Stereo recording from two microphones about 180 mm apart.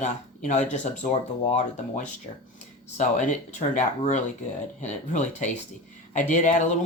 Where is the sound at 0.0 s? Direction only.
40° left (ahead or behind).